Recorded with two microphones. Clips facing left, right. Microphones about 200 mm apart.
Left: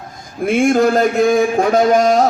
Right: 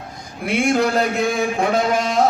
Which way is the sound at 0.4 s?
50° left (ahead or behind).